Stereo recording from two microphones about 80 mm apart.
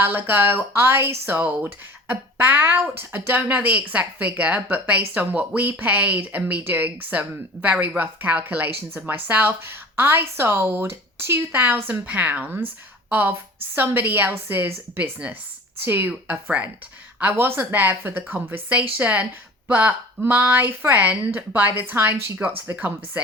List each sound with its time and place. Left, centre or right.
0.0 s a woman's voice: right